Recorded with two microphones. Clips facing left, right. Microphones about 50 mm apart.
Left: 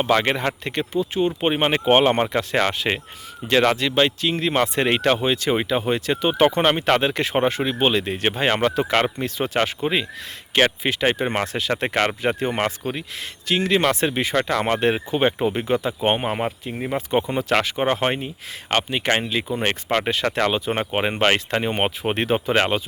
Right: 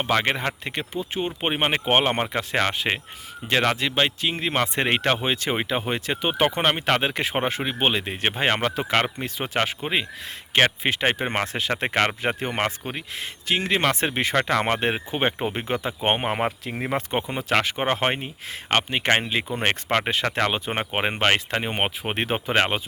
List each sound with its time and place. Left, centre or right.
0.0 s speech: centre
0.9 s speech: right
10.5 s speech: right
16.7 s speech: right
17.1 s speech: centre
21.2 s speech: centre